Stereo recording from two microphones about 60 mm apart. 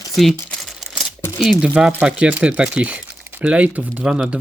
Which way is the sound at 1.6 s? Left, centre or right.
Centre.